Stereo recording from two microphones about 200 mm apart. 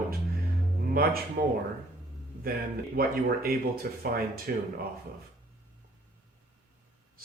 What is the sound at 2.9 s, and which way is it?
Speech, 50° right (ahead or behind).